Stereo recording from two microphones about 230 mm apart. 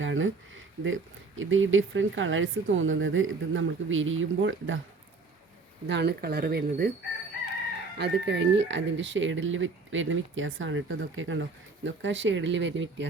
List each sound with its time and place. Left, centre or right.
0.0 s speech: right
5.9 s speech: right
7.9 s speech: right